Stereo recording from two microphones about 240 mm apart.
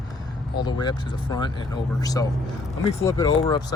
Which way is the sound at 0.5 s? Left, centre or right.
Centre.